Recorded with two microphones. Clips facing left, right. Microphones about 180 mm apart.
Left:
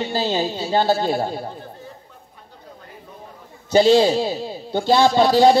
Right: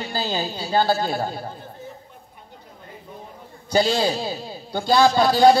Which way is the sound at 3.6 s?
25° left (ahead or behind).